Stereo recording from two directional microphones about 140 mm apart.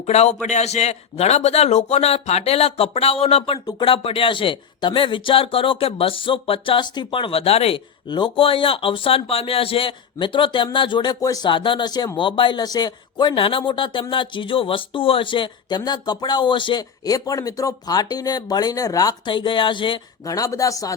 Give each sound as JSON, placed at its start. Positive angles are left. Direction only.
{"t": 0.0, "sound": "a man's voice", "side_deg": 50}
{"t": 8.0, "sound": "speech", "side_deg": 35}
{"t": 20.2, "sound": "speech", "side_deg": 25}